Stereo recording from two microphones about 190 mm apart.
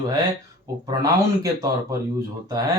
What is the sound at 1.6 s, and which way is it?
Speech, 15° right (ahead or behind).